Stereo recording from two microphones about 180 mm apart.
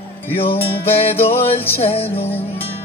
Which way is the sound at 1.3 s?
15° left (ahead or behind).